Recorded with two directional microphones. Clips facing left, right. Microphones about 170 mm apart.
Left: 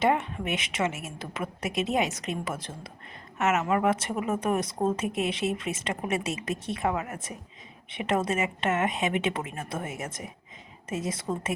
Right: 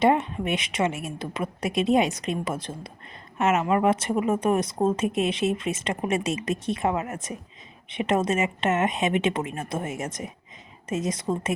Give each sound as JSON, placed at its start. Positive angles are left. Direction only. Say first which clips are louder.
{"t": 0.1, "sound": "speech", "louder": "right 4 dB", "side_deg": -30}